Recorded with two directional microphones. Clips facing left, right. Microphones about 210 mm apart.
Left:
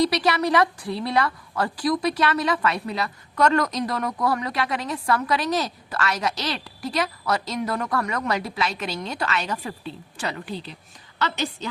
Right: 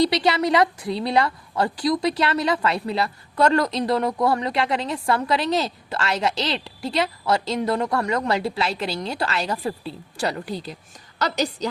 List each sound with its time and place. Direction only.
0.0 s a woman's voice: 25° right (ahead or behind)